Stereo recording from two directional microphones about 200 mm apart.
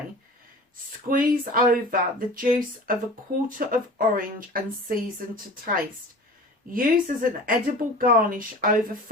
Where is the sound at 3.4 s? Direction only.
45° right (ahead or behind).